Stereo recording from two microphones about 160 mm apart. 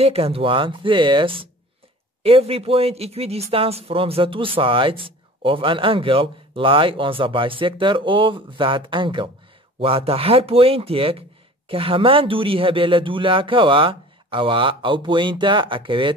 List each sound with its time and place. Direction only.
0.0 s speech: 40° right (ahead or behind)